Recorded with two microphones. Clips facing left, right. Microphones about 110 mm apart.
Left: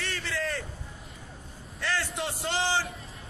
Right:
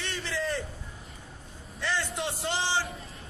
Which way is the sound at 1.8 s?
Centre (ahead or behind).